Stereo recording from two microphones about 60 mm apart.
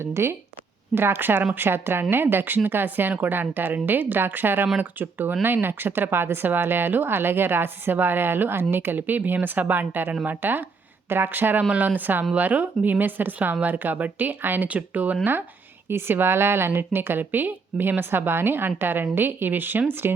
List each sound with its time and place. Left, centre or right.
0.0 s a woman's voice: right